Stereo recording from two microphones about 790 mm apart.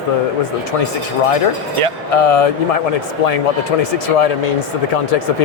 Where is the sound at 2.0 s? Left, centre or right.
Left.